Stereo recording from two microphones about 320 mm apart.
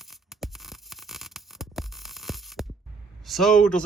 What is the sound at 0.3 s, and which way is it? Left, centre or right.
Music, centre.